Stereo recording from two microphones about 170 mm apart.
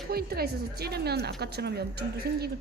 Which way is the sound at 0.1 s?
65° right (ahead or behind).